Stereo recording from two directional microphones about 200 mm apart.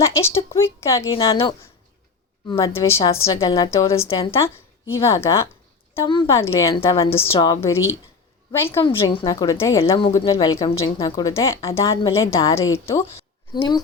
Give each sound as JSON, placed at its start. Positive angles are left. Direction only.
{"t": 0.0, "sound": "a woman's voice", "side_deg": 15}
{"t": 3.3, "sound": "a woman's voice", "side_deg": 25}
{"t": 3.7, "sound": "a woman's voice", "side_deg": 15}
{"t": 4.0, "sound": "a woman's voice", "side_deg": 30}
{"t": 4.4, "sound": "a woman's voice", "side_deg": 15}
{"t": 6.7, "sound": "a woman's voice", "side_deg": 25}
{"t": 8.9, "sound": "a woman's voice", "side_deg": 25}
{"t": 13.1, "sound": "a woman's voice", "side_deg": 25}